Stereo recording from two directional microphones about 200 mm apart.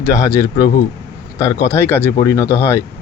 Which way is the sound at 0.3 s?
15° left (ahead or behind).